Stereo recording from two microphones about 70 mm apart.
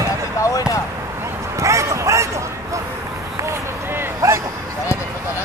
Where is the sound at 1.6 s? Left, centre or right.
Right.